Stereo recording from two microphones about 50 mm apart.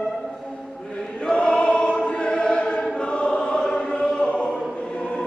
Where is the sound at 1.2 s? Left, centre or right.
Centre.